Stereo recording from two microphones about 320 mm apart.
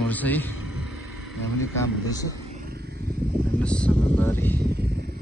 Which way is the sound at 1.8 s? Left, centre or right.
Centre.